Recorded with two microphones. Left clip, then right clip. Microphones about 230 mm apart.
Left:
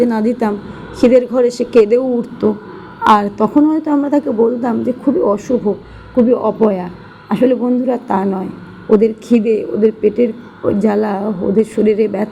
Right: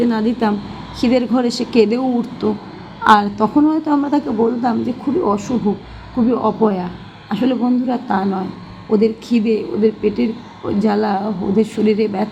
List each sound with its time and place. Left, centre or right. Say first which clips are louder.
0.0 s a woman's voice: left 3 dB; left